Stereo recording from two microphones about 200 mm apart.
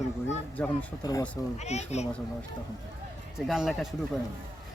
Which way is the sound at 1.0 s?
20° left (ahead or behind).